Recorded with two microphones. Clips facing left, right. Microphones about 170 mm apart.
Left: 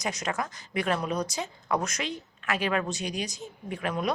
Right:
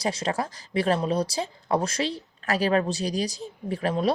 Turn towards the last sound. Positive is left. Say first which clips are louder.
# right 5 dB
turn(degrees=-30)  # may be behind; listen again after turning